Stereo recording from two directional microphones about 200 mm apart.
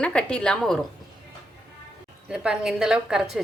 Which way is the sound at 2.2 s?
5° right (ahead or behind).